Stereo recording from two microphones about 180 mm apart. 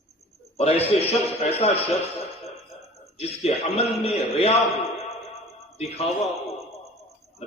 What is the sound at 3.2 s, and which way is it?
A man's voice, 35° left (ahead or behind).